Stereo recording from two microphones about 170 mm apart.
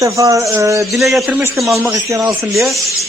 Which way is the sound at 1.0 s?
Centre (ahead or behind).